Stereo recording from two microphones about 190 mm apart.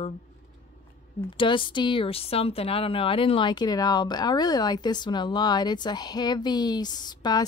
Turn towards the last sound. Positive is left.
turn(degrees=20)  # may be behind; listen again after turning